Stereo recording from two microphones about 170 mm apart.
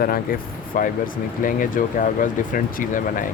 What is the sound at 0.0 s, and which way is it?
Speech, 60° left (ahead or behind).